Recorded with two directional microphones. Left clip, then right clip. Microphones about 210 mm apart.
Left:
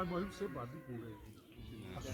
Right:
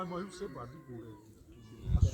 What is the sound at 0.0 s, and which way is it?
Speech, 55° left (ahead or behind).